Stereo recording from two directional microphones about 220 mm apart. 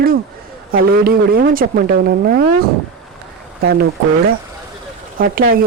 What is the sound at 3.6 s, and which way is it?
Speech, 45° right (ahead or behind).